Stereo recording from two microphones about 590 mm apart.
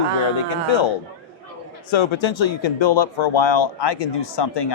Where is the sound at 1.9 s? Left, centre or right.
Left.